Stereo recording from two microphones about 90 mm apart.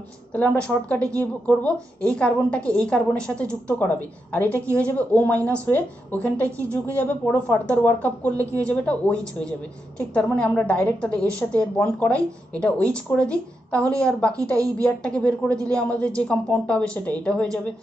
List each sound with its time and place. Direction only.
0.3 s a woman's voice: 15° left (ahead or behind)